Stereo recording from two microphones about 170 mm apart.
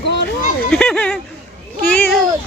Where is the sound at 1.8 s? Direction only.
10° left (ahead or behind).